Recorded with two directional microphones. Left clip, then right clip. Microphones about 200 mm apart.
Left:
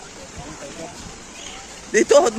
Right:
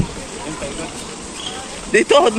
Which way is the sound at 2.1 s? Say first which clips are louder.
Right 1 dB; 25° left (ahead or behind).